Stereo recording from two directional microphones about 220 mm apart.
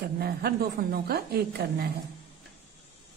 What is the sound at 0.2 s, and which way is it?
A woman's voice, 45° right (ahead or behind).